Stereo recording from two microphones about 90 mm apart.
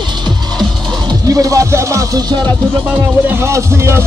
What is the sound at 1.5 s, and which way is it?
Speech, 35° right (ahead or behind).